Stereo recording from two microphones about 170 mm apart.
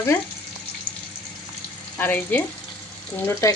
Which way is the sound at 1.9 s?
10° left (ahead or behind).